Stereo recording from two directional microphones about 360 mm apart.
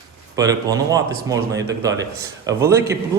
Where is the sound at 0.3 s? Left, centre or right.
Centre.